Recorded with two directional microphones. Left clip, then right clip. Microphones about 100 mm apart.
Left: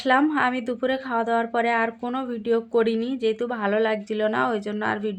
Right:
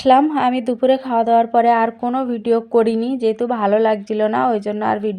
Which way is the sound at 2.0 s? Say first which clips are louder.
Right 8 dB; 50° right (ahead or behind).